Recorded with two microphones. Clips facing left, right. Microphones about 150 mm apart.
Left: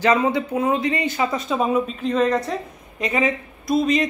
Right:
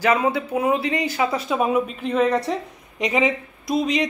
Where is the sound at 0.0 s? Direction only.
10° right (ahead or behind).